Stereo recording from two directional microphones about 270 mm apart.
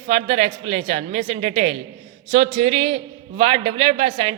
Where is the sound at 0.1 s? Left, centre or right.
Right.